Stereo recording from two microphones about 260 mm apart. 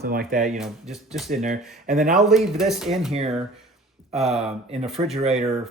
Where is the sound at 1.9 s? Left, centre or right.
Right.